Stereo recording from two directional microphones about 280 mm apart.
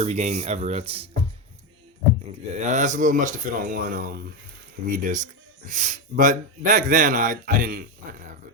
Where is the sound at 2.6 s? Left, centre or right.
Right.